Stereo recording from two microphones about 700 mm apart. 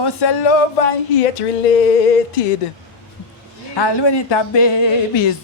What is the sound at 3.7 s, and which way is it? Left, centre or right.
A woman's voice, left.